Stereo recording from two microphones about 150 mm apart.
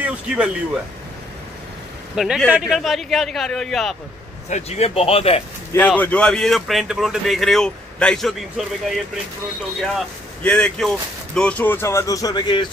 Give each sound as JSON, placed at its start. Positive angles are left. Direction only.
{"t": 2.1, "sound": "speech", "side_deg": -5}
{"t": 4.5, "sound": "speech", "side_deg": 50}
{"t": 5.7, "sound": "speech", "side_deg": 10}